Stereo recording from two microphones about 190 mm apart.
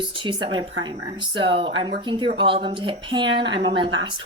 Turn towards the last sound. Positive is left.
turn(degrees=-25)  # may be behind; listen again after turning